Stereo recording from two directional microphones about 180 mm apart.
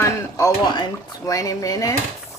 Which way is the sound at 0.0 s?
15° left (ahead or behind).